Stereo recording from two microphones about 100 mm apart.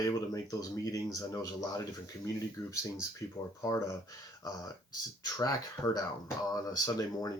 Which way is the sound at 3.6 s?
35° left (ahead or behind).